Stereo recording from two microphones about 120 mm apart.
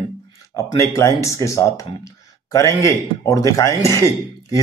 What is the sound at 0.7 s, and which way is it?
A man's voice, 25° left (ahead or behind).